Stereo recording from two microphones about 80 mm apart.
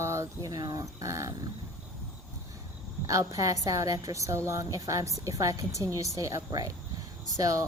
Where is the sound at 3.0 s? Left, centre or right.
Right.